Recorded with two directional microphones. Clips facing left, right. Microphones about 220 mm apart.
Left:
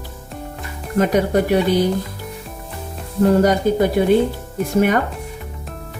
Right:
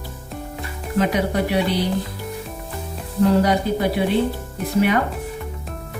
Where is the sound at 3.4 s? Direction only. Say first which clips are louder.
Left 4 dB; 45° left (ahead or behind).